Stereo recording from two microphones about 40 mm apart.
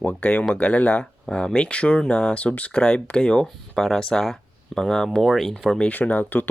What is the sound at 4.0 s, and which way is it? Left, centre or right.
Speech, centre.